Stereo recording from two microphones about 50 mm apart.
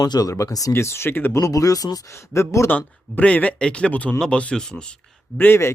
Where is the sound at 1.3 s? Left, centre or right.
Left.